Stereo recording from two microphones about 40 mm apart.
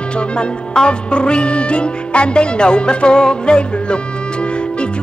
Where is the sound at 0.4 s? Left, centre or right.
Left.